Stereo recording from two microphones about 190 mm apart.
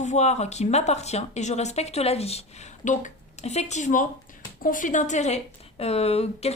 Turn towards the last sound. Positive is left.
turn(degrees=35)  # may be behind; listen again after turning